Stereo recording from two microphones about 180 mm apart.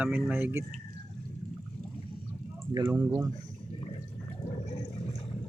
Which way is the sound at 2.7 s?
20° right (ahead or behind).